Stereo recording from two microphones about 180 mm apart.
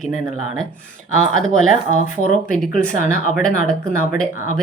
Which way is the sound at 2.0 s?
45° left (ahead or behind).